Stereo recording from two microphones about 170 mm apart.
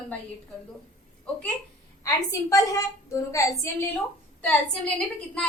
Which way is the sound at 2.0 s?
20° left (ahead or behind).